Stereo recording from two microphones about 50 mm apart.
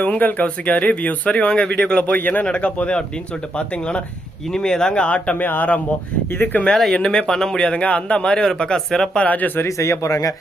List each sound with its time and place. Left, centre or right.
0.0 s speech: left
4.5 s a man's voice: centre
5.0 s speech: left
6.9 s a man's voice: centre
9.2 s speech: left
9.6 s speech: left